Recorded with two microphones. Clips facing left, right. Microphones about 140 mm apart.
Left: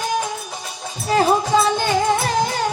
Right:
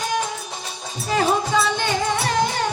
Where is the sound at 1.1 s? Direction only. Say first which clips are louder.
Left 3 dB; 35° left (ahead or behind).